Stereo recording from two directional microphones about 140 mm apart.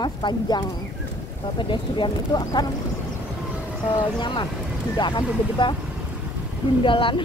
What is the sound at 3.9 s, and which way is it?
Speech, 35° left (ahead or behind).